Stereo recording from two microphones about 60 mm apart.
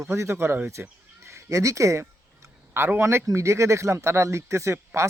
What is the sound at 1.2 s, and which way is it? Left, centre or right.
Speech, right.